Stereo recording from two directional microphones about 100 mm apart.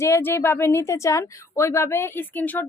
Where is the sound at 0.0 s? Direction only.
25° left (ahead or behind).